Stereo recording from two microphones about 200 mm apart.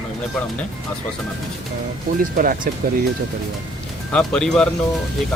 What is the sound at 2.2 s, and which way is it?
Speech, 45° right (ahead or behind).